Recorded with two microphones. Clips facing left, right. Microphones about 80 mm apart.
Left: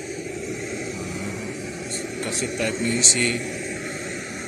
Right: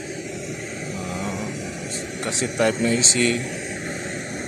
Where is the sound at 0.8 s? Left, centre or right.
Right.